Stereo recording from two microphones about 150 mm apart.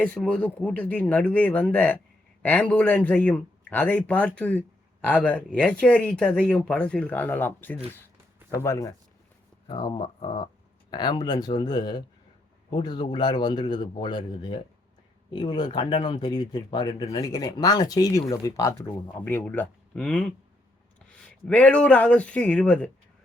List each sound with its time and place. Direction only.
0.0 s a man's voice: 10° left (ahead or behind)
21.4 s a man's voice: 10° left (ahead or behind)